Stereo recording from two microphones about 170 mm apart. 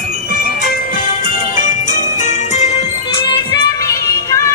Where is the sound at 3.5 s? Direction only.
15° left (ahead or behind).